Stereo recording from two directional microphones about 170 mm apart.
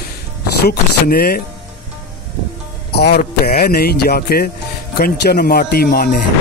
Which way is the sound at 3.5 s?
60° left (ahead or behind).